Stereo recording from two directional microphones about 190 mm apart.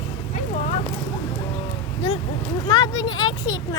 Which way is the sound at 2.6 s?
20° left (ahead or behind).